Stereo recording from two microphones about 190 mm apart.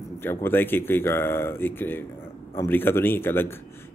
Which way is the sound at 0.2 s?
10° left (ahead or behind).